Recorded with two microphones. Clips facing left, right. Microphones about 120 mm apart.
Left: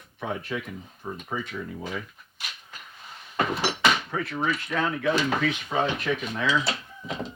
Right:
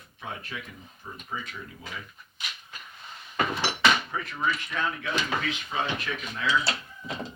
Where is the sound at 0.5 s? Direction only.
55° left (ahead or behind).